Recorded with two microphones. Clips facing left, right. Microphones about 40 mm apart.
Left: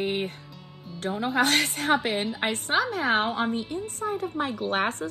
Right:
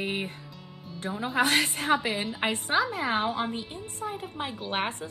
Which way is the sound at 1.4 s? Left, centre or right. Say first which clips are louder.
Even; left.